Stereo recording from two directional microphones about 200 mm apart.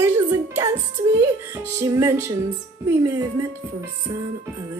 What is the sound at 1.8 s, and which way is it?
Speech, 15° right (ahead or behind).